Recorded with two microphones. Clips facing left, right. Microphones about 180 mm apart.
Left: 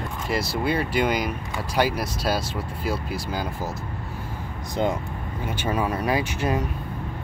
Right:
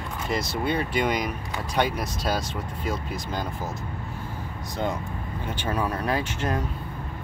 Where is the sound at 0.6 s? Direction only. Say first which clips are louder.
Left 2 dB; 5° left (ahead or behind).